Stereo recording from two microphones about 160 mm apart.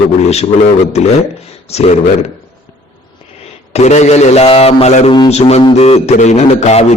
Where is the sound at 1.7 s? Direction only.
40° left (ahead or behind).